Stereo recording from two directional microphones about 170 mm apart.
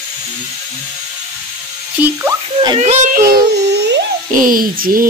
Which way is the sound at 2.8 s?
45° right (ahead or behind).